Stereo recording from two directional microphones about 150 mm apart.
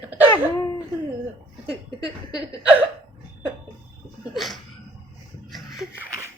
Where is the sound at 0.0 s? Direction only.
10° right (ahead or behind).